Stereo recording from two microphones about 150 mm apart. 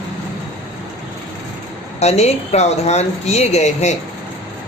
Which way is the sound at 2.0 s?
45° left (ahead or behind).